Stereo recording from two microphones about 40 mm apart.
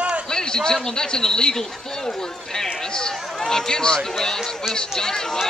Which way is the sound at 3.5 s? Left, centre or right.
Centre.